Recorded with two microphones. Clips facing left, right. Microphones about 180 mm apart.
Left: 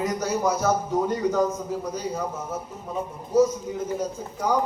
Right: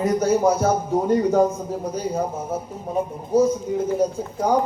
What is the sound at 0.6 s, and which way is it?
Speech, 30° right (ahead or behind).